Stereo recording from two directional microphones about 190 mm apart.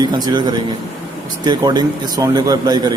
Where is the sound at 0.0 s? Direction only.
20° right (ahead or behind).